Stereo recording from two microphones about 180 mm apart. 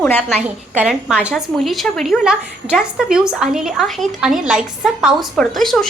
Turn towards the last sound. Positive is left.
turn(degrees=0)  # may be behind; listen again after turning